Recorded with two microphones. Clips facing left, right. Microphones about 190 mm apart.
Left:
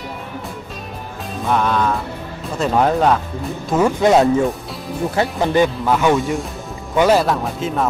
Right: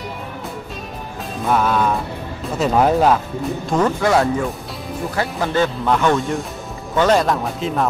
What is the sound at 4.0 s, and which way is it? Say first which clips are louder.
Speech: left 4 dB; 20° left (ahead or behind).